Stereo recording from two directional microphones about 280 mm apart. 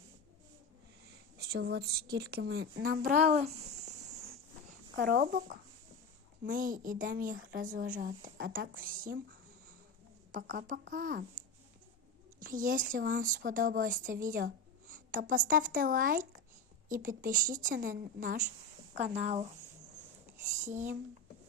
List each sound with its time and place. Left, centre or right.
1.4 s speech: right
4.9 s a woman's voice: right
10.3 s a woman's voice: right
12.4 s a woman's voice: right